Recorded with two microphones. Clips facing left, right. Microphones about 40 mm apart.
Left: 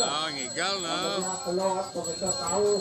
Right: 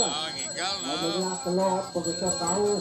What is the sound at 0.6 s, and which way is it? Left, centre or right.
Speech, centre.